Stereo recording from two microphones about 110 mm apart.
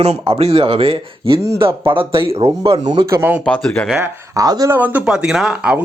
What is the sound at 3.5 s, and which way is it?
Speech, 15° left (ahead or behind).